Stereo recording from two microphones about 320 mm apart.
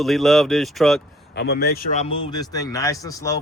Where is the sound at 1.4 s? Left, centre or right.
Left.